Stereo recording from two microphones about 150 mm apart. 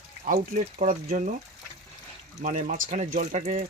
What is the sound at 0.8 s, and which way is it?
Speech, 55° right (ahead or behind).